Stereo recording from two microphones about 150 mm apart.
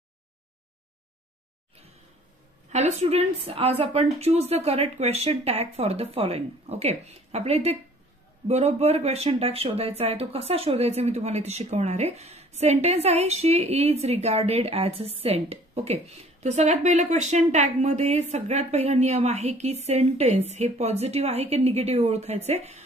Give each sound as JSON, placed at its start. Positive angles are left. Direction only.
{"t": 2.7, "sound": "speech", "side_deg": -50}